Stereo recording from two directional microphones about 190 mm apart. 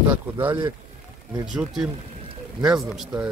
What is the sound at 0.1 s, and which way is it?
Speech, 10° right (ahead or behind).